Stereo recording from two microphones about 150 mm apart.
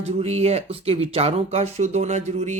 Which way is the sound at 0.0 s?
45° right (ahead or behind).